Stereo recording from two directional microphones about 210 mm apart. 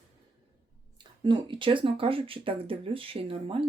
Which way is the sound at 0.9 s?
20° right (ahead or behind).